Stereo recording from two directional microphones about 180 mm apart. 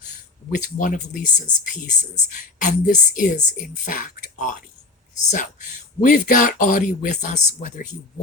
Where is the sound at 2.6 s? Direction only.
45° left (ahead or behind).